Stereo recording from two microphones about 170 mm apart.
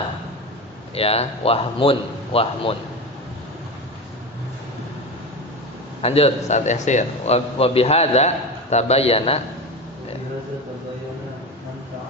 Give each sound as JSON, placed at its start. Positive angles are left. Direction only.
{"t": 0.9, "sound": "a man's voice", "side_deg": 35}
{"t": 6.0, "sound": "a man's voice", "side_deg": 35}